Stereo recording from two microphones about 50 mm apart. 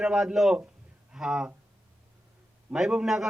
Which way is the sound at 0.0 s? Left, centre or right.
Centre.